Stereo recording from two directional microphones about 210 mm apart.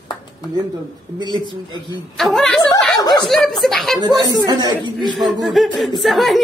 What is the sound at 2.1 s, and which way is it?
Speech, centre (ahead or behind).